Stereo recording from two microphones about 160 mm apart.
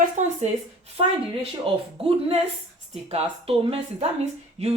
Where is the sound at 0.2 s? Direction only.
50° right (ahead or behind).